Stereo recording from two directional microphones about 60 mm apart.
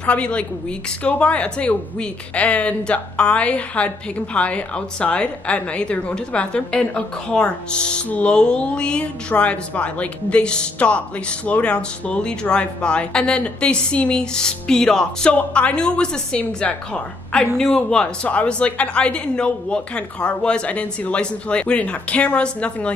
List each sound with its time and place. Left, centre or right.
0.0 s speech: centre
15.3 s a woman's voice: left